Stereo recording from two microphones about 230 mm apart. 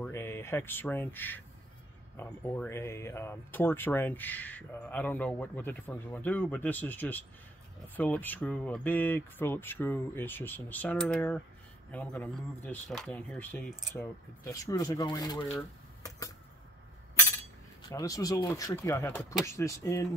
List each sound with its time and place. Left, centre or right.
0.0 s speech: centre
14.4 s speech: centre
15.5 s a sound: centre
17.8 s speech: centre